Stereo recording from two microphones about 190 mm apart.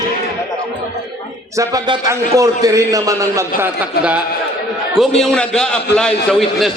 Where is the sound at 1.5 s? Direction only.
20° right (ahead or behind).